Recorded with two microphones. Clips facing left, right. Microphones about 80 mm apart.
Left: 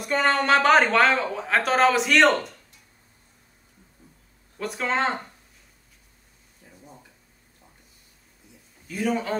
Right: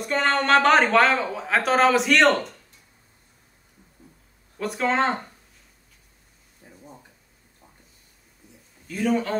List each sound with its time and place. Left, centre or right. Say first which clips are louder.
0.0 s speech: even; centre
4.6 s speech: right 3 dB; centre
6.6 s a sound: right 2 dB; right
8.8 s speech: right 2 dB; centre